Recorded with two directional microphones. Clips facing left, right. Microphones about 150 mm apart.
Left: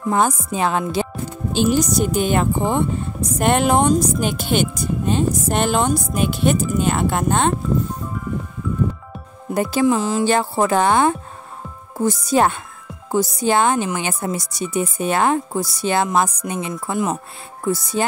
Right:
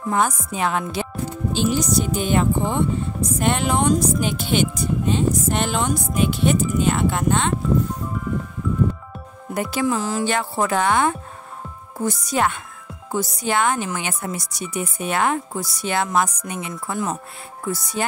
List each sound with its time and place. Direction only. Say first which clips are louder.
0.1 s music: left 3 dB; 30° left (ahead or behind)
1.5 s speech: left 4 dB; 50° left (ahead or behind)
9.5 s speech: left 5 dB; 30° left (ahead or behind)
10.2 s music: left 4 dB; 30° left (ahead or behind)
12.0 s speech: left 5 dB; 30° left (ahead or behind)